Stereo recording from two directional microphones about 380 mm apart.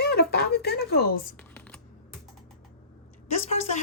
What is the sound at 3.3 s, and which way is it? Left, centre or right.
Speech, centre.